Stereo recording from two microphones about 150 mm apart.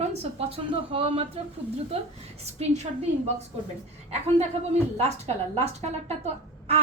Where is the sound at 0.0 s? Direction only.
45° right (ahead or behind).